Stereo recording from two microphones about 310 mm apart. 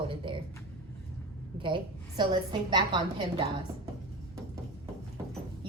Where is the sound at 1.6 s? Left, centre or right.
Centre.